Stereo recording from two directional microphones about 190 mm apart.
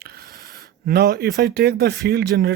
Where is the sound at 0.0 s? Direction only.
55° right (ahead or behind).